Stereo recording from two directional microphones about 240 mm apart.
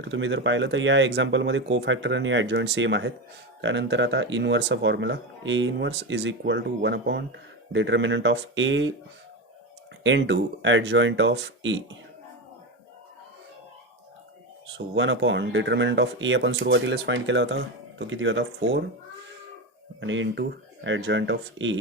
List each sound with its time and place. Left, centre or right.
0.1 s speech: right
10.0 s speech: right
14.9 s speech: right
20.0 s speech: right